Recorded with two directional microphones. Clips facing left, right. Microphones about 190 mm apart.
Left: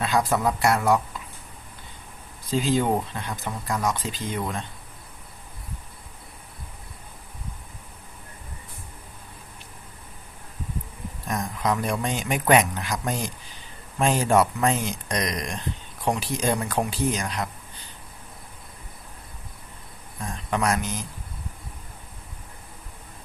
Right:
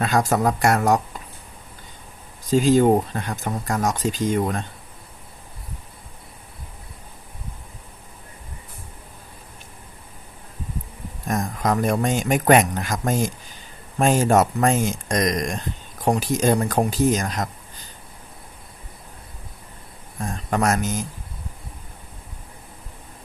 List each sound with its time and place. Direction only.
0.0 s speech: 45° right (ahead or behind)
2.5 s speech: 45° right (ahead or behind)
11.3 s speech: 45° right (ahead or behind)
20.2 s speech: 45° right (ahead or behind)